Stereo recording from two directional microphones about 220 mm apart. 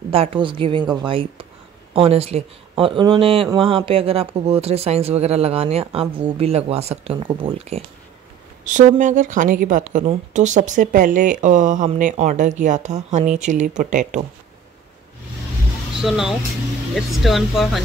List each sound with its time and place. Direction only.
0.1 s speech: 25° right (ahead or behind)
16.0 s speech: centre (ahead or behind)